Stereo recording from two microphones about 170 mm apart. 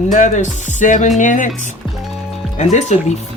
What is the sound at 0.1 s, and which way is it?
Speech, 45° left (ahead or behind).